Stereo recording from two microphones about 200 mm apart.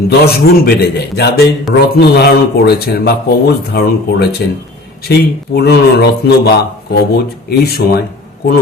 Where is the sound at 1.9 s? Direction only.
50° left (ahead or behind).